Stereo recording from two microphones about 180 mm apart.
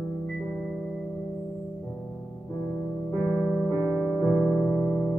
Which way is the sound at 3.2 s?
10° right (ahead or behind).